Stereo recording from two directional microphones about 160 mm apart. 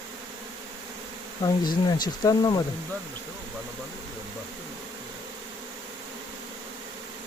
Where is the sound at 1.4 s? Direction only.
25° left (ahead or behind).